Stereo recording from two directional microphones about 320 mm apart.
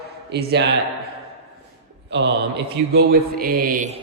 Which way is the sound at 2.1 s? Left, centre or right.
Right.